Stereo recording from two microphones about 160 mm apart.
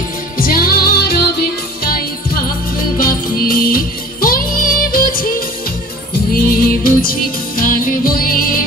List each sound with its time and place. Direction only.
0.4 s music: 65° left (ahead or behind)
3.0 s music: 65° left (ahead or behind)
6.3 s music: 65° left (ahead or behind)